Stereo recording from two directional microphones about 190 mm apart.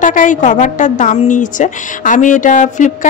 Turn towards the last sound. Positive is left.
turn(degrees=40)  # may be behind; listen again after turning